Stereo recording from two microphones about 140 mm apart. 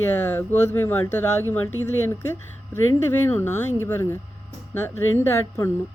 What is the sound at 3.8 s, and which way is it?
Speech, 15° left (ahead or behind).